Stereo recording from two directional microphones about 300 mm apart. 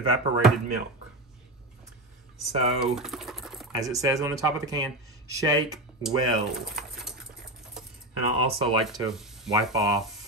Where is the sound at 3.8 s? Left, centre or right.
Centre.